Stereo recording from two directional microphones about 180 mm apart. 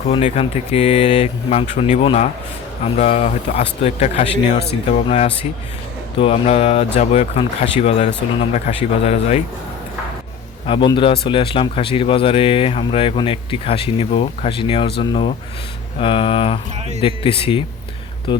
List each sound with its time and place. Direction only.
0.1 s speech: 35° left (ahead or behind)
10.7 s speech: 25° left (ahead or behind)